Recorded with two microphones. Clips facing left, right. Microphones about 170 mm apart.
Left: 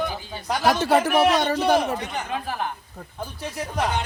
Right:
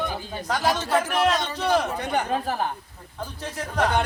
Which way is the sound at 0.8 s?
70° left (ahead or behind).